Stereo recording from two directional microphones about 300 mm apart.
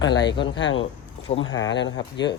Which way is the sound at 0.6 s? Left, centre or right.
Left.